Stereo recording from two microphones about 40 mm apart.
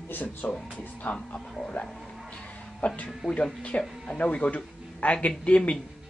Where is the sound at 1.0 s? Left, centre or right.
Left.